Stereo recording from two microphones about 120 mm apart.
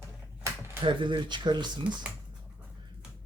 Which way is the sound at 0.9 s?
40° right (ahead or behind).